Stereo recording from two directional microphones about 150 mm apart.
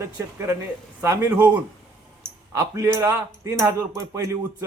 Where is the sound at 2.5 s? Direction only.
20° right (ahead or behind).